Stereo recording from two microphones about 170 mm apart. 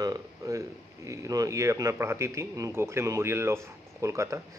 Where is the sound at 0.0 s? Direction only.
20° right (ahead or behind).